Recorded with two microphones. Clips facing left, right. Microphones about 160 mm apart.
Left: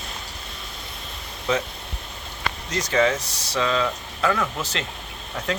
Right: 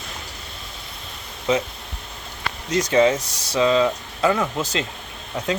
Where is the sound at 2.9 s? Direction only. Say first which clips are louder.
Right 3 dB; 20° right (ahead or behind).